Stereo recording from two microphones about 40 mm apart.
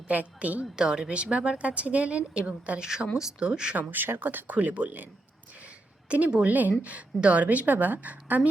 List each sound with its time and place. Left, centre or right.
0.1 s a woman's voice: right
0.6 s a woman's voice: centre
3.2 s speech: centre
3.8 s speech: right
4.5 s a woman's voice: right
6.1 s a woman's voice: right